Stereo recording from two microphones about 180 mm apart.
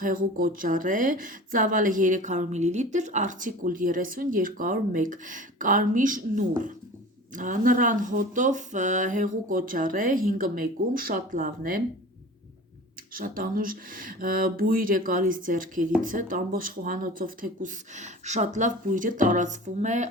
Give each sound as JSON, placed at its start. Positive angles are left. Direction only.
{"t": 0.0, "sound": "speech", "side_deg": -50}
{"t": 13.1, "sound": "speech", "side_deg": -50}